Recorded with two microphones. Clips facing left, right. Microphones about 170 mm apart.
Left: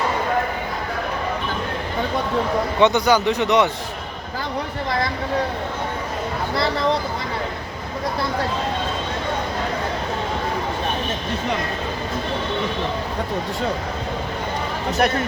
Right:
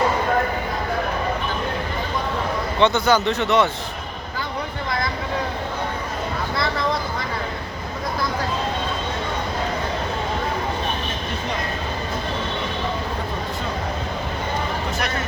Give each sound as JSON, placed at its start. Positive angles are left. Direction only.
{"t": 2.7, "sound": "a man's voice", "side_deg": 15}